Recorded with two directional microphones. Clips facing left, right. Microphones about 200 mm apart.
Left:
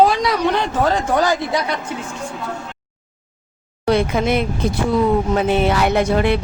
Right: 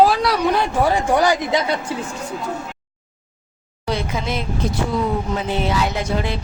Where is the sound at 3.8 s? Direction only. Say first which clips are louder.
Left 7 dB; 60° left (ahead or behind).